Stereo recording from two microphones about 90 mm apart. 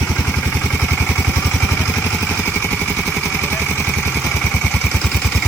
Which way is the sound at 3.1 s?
5° left (ahead or behind).